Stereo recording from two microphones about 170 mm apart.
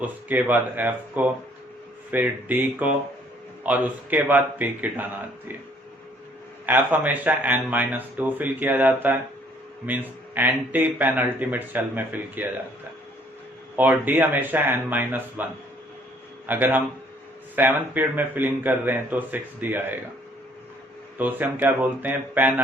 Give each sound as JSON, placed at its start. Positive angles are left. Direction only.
{"t": 0.0, "sound": "speech", "side_deg": -10}
{"t": 6.7, "sound": "speech", "side_deg": -10}
{"t": 13.7, "sound": "speech", "side_deg": -10}
{"t": 16.5, "sound": "speech", "side_deg": -10}
{"t": 21.2, "sound": "speech", "side_deg": -10}